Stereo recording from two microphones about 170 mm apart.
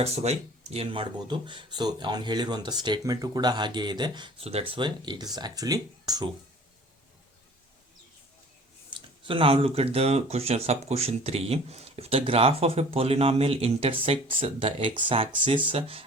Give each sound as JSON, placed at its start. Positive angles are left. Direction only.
{"t": 0.0, "sound": "speech", "side_deg": -40}
{"t": 8.9, "sound": "speech", "side_deg": -30}